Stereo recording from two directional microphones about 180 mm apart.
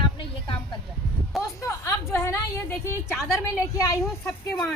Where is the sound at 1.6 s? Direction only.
15° left (ahead or behind).